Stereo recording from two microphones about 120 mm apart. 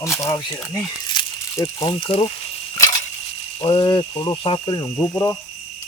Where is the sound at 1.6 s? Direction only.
35° left (ahead or behind).